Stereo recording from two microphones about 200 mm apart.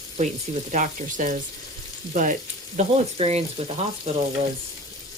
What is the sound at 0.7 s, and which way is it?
Speech, 40° right (ahead or behind).